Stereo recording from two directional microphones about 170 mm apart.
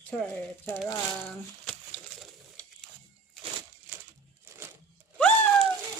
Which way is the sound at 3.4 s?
35° right (ahead or behind).